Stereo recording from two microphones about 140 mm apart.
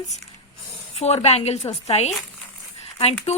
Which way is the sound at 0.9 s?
50° left (ahead or behind).